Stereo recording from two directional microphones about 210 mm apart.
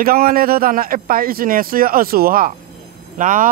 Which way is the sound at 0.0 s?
45° right (ahead or behind).